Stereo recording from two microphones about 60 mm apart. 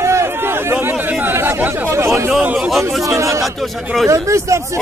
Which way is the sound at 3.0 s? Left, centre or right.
Right.